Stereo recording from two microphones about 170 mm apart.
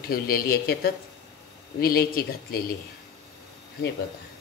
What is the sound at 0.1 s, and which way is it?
Speech, 60° left (ahead or behind).